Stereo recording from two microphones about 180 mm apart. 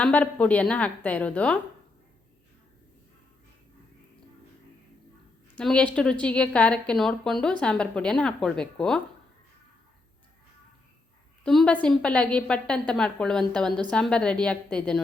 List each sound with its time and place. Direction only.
0.0 s a woman's voice: 10° left (ahead or behind)
5.5 s a woman's voice: 5° left (ahead or behind)
11.4 s a woman's voice: 5° left (ahead or behind)